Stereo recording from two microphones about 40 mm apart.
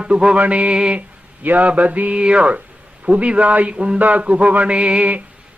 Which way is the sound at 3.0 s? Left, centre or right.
Right.